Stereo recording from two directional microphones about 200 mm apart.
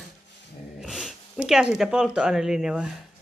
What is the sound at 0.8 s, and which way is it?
Speech, 5° right (ahead or behind).